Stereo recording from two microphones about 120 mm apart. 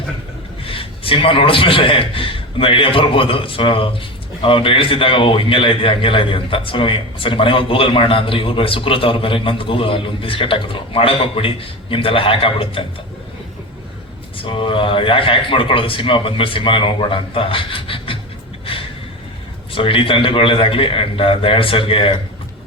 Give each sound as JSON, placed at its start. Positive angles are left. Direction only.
{"t": 0.6, "sound": "a man's voice", "side_deg": 50}
{"t": 14.3, "sound": "a man's voice", "side_deg": 45}
{"t": 18.6, "sound": "gasp", "side_deg": 50}
{"t": 19.7, "sound": "a man's voice", "side_deg": 45}